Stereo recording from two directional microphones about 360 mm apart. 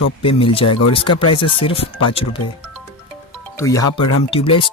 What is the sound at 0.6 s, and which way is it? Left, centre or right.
Speech, left.